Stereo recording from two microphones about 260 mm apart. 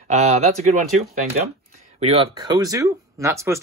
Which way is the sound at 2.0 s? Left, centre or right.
Right.